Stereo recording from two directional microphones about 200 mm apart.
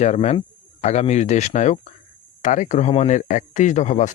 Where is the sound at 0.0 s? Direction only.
35° left (ahead or behind).